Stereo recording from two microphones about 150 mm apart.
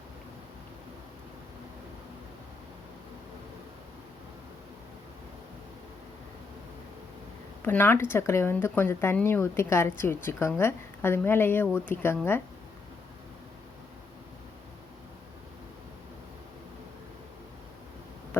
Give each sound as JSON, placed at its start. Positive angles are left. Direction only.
{"t": 7.6, "sound": "speech", "side_deg": 15}